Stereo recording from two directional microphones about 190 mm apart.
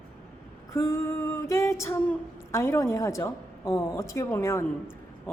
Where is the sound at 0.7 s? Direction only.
15° left (ahead or behind).